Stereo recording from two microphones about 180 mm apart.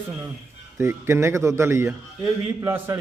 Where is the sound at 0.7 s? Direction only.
15° right (ahead or behind).